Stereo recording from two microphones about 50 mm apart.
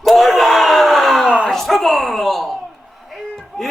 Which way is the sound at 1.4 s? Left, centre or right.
Centre.